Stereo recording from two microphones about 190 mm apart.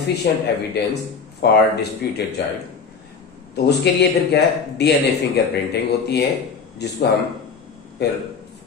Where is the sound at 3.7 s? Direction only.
60° left (ahead or behind).